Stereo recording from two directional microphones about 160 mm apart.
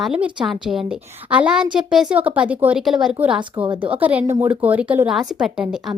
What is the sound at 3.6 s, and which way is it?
Speech, 30° right (ahead or behind).